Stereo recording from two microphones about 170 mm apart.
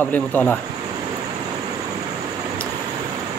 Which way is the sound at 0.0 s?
10° left (ahead or behind).